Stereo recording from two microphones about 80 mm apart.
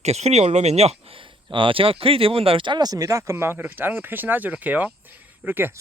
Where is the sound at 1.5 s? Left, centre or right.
Right.